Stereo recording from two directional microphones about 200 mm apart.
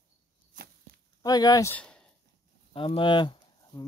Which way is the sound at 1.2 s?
20° left (ahead or behind).